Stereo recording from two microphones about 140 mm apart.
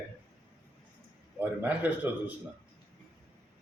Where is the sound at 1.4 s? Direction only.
10° right (ahead or behind).